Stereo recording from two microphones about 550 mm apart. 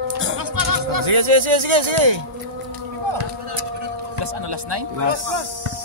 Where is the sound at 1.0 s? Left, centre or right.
Right.